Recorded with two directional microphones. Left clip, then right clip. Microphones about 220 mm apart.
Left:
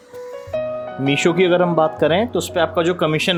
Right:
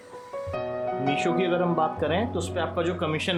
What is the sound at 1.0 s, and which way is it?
Speech, 30° left (ahead or behind).